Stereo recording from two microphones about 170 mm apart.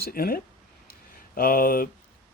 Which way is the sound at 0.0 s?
60° left (ahead or behind).